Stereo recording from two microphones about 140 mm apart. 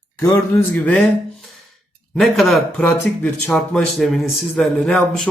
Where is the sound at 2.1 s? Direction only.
Centre (ahead or behind).